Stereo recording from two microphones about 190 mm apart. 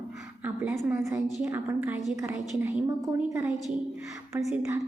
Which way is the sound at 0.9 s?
15° right (ahead or behind).